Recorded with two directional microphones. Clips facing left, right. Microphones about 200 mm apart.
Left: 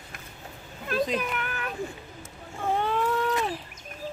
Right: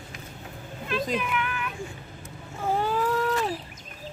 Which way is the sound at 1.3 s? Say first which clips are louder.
Right 2 dB; 40° left (ahead or behind).